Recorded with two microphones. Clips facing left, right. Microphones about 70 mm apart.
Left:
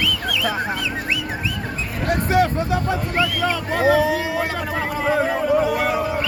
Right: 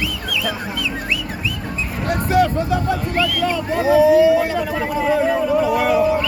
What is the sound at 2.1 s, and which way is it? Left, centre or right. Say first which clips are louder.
Speech: right 1 dB; left.